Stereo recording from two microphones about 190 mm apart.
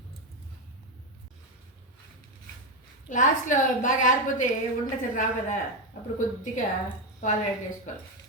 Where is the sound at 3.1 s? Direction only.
40° left (ahead or behind).